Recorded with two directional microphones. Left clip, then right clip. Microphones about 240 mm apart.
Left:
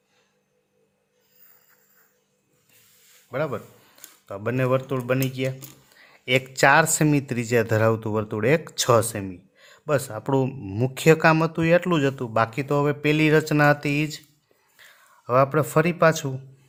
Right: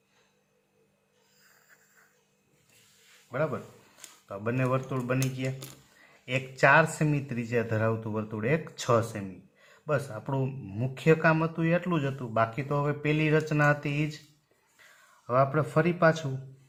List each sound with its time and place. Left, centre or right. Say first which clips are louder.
3.3 s speech: left 4 dB; left
15.3 s speech: left 6 dB; left